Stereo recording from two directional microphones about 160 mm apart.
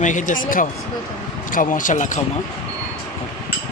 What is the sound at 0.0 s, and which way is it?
Speech, 50° left (ahead or behind).